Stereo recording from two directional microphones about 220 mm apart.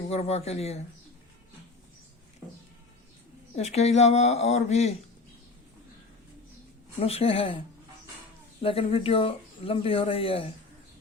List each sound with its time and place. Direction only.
0.1 s speech: 30° left (ahead or behind)
2.4 s music: 15° right (ahead or behind)
3.5 s speech: 30° left (ahead or behind)
7.0 s speech: 25° left (ahead or behind)
8.6 s speech: 25° left (ahead or behind)